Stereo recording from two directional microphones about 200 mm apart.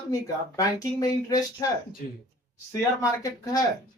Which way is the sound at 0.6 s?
20° left (ahead or behind).